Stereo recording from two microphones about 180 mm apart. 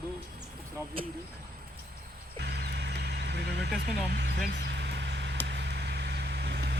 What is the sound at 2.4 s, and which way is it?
Vehicle, 65° right (ahead or behind).